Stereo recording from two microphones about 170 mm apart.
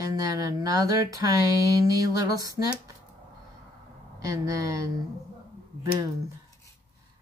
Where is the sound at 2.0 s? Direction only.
20° right (ahead or behind).